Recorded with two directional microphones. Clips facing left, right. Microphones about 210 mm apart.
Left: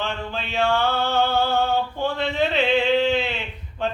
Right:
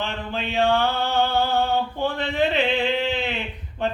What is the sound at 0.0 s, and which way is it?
Mantra, 15° right (ahead or behind).